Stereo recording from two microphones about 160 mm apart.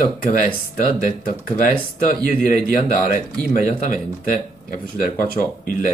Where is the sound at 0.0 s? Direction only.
55° left (ahead or behind).